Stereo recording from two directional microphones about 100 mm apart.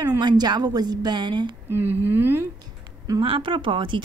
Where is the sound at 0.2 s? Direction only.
45° right (ahead or behind).